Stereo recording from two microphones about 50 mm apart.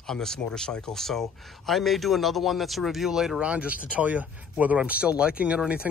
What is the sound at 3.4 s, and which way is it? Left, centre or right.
Speech, right.